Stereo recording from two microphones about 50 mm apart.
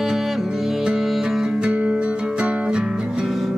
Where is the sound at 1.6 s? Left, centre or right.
Centre.